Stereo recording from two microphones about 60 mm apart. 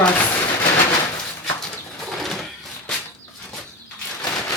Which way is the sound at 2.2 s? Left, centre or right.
Centre.